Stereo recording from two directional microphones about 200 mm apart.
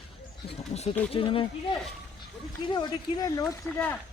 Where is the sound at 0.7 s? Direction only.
30° left (ahead or behind).